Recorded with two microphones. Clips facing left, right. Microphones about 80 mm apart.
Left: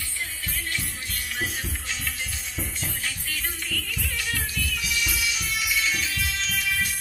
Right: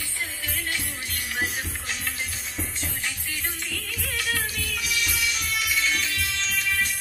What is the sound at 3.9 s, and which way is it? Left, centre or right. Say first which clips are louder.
Music: right 5 dB; centre.